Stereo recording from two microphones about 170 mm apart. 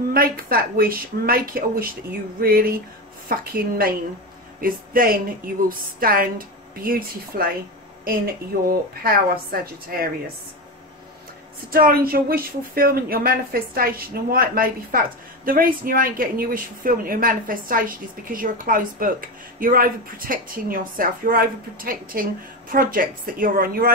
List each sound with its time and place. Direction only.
0.1 s a woman's voice: 60° right (ahead or behind)
8.6 s a woman's voice: 60° right (ahead or behind)
11.7 s a woman's voice: 60° right (ahead or behind)